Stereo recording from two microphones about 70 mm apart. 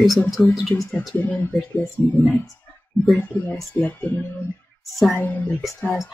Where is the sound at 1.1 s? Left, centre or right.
Left.